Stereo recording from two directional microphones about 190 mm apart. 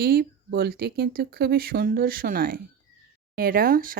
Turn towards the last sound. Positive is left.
turn(degrees=-50)  # may be behind; listen again after turning